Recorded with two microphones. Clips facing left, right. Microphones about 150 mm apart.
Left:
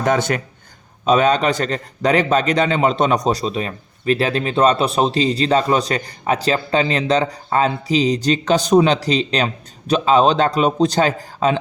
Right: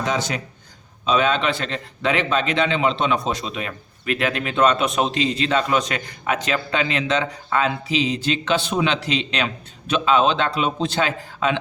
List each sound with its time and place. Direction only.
0.0 s speech: 55° left (ahead or behind)
1.0 s a man's voice: 45° left (ahead or behind)